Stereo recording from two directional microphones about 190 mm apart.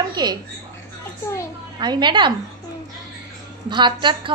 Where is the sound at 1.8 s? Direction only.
25° right (ahead or behind).